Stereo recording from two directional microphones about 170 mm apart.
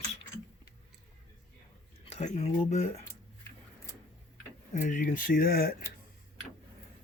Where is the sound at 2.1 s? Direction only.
40° left (ahead or behind).